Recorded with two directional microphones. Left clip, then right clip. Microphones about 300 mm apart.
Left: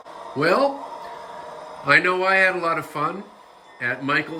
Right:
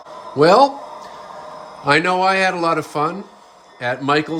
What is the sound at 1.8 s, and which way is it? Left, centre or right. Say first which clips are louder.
Speech: right 3 dB; centre.